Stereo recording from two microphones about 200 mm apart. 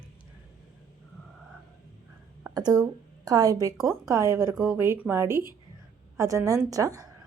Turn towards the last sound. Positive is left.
turn(degrees=-15)  # may be behind; listen again after turning